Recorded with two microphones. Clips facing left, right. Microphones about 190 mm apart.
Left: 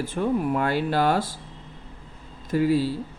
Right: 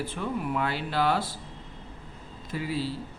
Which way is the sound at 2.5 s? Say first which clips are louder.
Left 10 dB; 45° left (ahead or behind).